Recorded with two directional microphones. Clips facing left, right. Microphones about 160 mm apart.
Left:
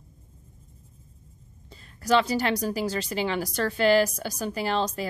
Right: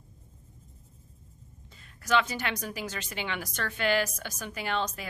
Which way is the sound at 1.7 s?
35° left (ahead or behind).